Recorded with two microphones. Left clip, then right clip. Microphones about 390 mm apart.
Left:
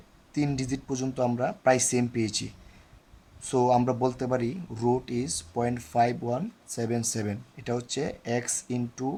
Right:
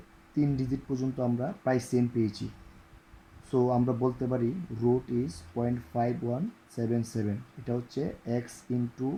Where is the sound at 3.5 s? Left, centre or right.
Left.